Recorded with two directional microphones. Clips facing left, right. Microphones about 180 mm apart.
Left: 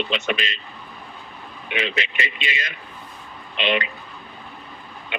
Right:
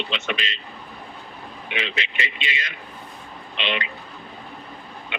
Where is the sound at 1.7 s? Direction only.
45° left (ahead or behind).